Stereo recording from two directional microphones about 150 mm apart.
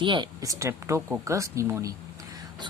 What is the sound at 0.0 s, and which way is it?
Speech, 30° right (ahead or behind).